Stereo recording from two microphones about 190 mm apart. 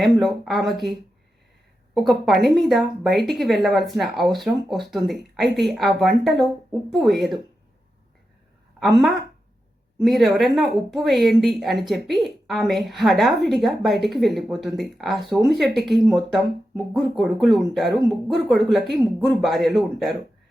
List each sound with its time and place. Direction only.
0.0 s speech: centre (ahead or behind)
2.0 s speech: centre (ahead or behind)
8.8 s speech: centre (ahead or behind)